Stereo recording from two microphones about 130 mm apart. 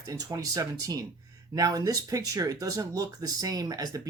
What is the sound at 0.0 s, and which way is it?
Speech, 25° right (ahead or behind).